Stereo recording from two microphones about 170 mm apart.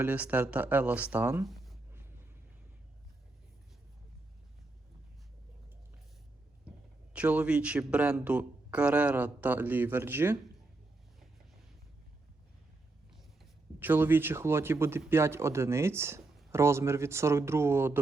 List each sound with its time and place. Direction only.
0.0 s a man's voice: 10° right (ahead or behind)
1.5 s writing: centre (ahead or behind)
7.1 s a man's voice: 10° right (ahead or behind)
13.7 s a man's voice: 10° right (ahead or behind)